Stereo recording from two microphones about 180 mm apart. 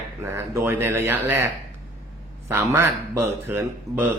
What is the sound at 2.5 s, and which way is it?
Speech, 10° right (ahead or behind).